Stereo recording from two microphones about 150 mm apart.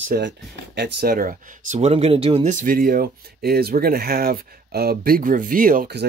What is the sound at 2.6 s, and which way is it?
Speech, 75° right (ahead or behind).